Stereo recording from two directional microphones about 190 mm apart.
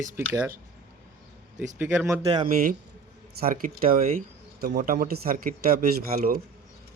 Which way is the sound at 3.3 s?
50° right (ahead or behind).